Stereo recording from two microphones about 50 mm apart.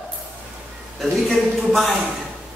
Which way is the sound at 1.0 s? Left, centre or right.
Centre.